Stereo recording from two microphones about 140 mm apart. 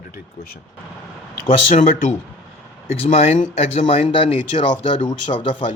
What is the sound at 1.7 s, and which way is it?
Speech, 65° left (ahead or behind).